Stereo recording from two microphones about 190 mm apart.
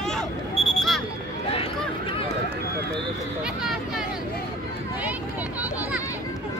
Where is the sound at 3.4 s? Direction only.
5° right (ahead or behind).